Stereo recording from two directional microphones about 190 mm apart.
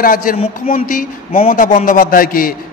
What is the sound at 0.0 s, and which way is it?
A man's voice, 50° left (ahead or behind).